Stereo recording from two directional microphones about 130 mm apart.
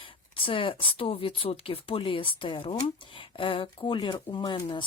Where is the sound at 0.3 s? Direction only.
45° left (ahead or behind).